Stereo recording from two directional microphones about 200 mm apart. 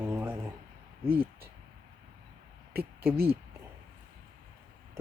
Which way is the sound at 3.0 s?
10° right (ahead or behind).